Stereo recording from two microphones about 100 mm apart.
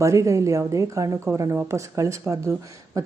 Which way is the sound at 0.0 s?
30° right (ahead or behind).